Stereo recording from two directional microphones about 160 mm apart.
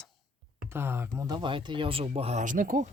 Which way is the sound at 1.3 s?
30° right (ahead or behind).